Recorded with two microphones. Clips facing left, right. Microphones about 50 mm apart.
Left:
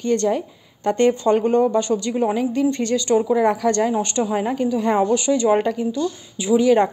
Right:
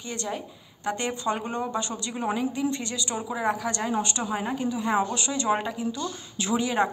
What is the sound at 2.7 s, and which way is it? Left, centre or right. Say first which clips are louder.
Speech: left 12 dB; left.